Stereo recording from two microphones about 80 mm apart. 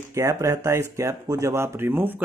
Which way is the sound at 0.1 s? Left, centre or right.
Right.